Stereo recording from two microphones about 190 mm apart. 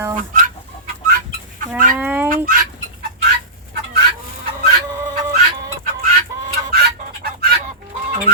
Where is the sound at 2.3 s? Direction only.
50° right (ahead or behind).